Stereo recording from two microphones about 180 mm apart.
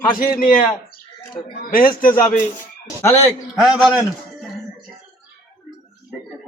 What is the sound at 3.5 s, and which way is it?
Speech, centre (ahead or behind).